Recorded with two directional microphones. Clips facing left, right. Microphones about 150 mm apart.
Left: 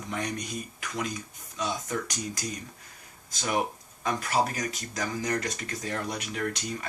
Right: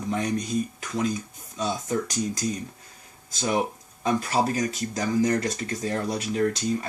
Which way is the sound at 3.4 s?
30° right (ahead or behind).